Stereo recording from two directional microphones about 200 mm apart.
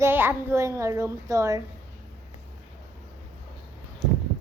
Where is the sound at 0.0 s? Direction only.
10° right (ahead or behind).